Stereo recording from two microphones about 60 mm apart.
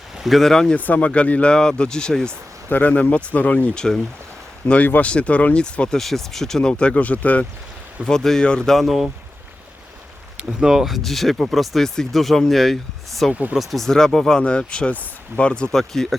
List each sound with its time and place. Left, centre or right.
0.2 s speech: centre
0.8 s speech: left
2.6 s speech: left
3.8 s speech: centre
4.6 s speech: left
6.0 s speech: centre; by 7.4 s left
8.0 s speech: centre
8.7 s speech: centre
10.6 s speech: centre
15.7 s speech: centre